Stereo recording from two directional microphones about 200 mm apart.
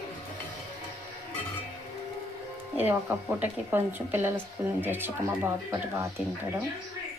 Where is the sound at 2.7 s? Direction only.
10° right (ahead or behind).